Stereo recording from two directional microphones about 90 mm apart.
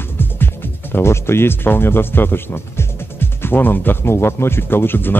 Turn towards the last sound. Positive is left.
turn(degrees=25)  # may be behind; listen again after turning